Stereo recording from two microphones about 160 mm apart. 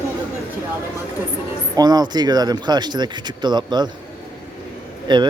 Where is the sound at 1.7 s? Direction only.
25° right (ahead or behind).